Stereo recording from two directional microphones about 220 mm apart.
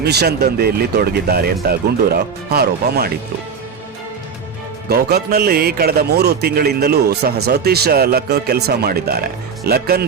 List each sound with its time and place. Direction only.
0.0 s a man's voice: 45° right (ahead or behind)
4.9 s a man's voice: 45° right (ahead or behind)